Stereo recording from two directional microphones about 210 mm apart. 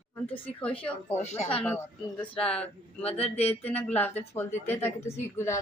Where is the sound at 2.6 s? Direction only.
30° left (ahead or behind).